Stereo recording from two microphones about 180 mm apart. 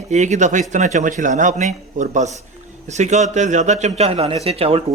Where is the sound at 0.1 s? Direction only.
40° right (ahead or behind).